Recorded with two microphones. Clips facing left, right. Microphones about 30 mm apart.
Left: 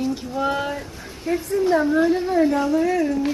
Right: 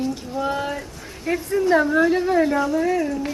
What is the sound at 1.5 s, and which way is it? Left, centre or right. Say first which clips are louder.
Speech: right 1 dB; right.